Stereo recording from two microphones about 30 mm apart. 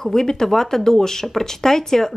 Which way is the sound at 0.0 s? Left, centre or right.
Centre.